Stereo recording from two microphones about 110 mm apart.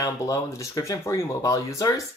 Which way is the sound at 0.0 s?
30° left (ahead or behind).